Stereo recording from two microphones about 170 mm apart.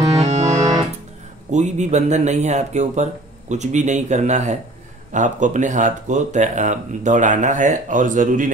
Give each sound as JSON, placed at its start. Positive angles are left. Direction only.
{"t": 0.2, "sound": "music", "side_deg": -40}
{"t": 1.5, "sound": "speech", "side_deg": -45}